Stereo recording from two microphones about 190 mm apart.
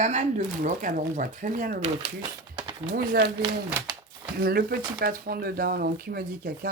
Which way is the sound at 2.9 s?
55° right (ahead or behind).